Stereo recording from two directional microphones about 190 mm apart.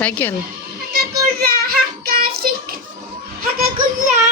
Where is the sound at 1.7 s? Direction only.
50° right (ahead or behind).